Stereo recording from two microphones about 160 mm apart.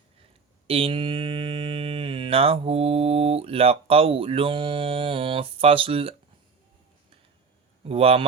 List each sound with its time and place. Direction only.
0.7 s mantra: 35° right (ahead or behind)
7.9 s speech: 40° right (ahead or behind)